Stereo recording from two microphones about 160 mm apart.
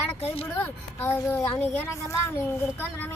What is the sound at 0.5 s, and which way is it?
Speech, 15° left (ahead or behind).